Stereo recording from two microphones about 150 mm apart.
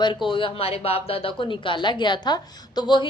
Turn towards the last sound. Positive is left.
turn(degrees=30)  # may be behind; listen again after turning